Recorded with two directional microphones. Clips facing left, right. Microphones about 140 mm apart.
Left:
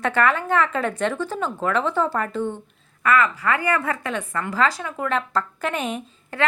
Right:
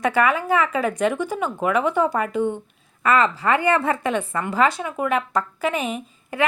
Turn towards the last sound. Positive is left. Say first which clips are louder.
# right 2 dB
turn(degrees=-10)  # may be behind; listen again after turning